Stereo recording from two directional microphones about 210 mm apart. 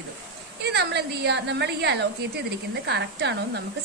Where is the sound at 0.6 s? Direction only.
55° right (ahead or behind).